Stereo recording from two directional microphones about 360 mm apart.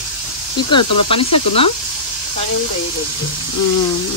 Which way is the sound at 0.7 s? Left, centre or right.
Centre.